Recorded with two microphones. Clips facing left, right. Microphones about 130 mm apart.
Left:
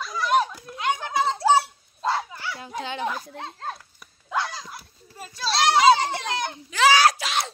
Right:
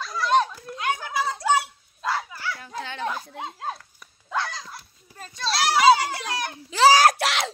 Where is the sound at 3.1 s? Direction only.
5° right (ahead or behind).